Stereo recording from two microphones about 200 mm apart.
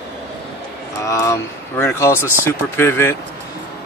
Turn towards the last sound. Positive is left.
turn(degrees=15)  # may be behind; listen again after turning